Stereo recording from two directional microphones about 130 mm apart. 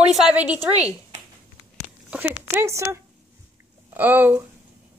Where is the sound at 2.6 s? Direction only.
20° right (ahead or behind).